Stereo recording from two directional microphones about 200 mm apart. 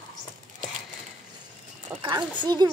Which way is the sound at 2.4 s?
20° right (ahead or behind).